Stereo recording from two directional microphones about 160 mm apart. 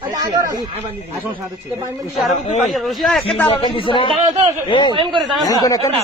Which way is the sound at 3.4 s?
30° left (ahead or behind).